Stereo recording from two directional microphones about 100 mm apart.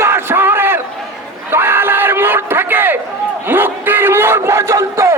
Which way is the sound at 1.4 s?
20° right (ahead or behind).